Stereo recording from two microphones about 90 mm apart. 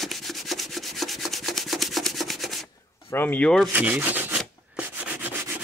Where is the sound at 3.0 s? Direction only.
25° left (ahead or behind).